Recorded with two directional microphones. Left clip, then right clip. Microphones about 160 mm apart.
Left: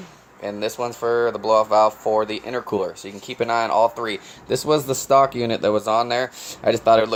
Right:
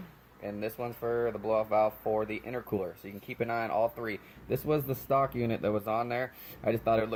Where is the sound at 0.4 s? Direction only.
15° left (ahead or behind).